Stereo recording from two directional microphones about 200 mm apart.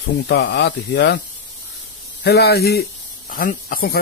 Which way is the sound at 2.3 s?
55° left (ahead or behind).